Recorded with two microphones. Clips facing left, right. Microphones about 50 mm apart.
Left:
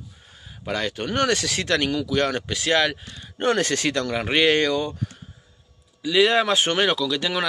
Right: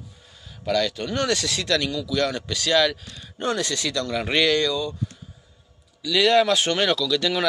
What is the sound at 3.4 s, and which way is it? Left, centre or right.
Speech, left.